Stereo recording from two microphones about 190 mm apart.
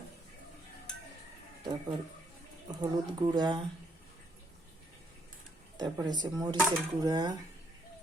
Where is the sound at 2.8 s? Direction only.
20° right (ahead or behind).